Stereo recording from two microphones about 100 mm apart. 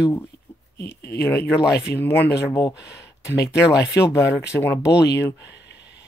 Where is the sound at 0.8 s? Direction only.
25° left (ahead or behind).